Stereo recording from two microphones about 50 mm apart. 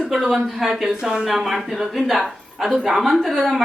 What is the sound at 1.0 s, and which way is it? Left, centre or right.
Speech, centre.